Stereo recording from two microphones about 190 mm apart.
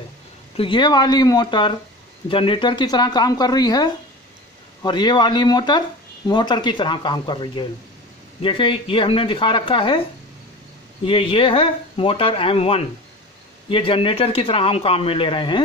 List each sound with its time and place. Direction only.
0.6 s speech: 25° left (ahead or behind)
11.1 s speech: 30° left (ahead or behind)